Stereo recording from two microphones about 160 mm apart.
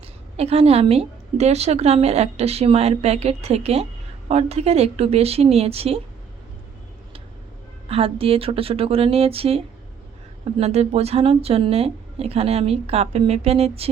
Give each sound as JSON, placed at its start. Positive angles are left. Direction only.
{"t": 0.3, "sound": "a woman's voice", "side_deg": -40}
{"t": 7.9, "sound": "a woman's voice", "side_deg": -35}